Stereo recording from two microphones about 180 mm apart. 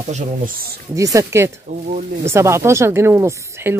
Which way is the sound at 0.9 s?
20° right (ahead or behind).